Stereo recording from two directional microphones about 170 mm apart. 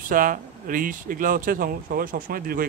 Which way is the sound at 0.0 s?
55° right (ahead or behind).